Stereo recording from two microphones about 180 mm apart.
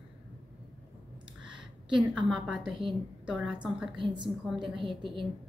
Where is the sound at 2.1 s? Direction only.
5° right (ahead or behind).